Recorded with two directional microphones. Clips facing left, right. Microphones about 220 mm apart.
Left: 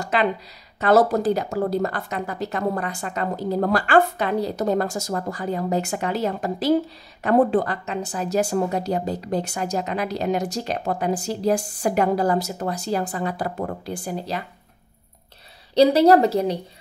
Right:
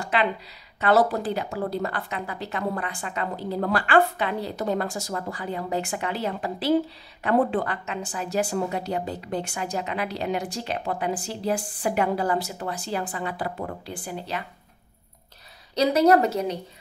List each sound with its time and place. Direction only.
0.0 s a sound: 40° left (ahead or behind)
0.7 s a woman's voice: 40° left (ahead or behind)
15.7 s a woman's voice: 30° left (ahead or behind)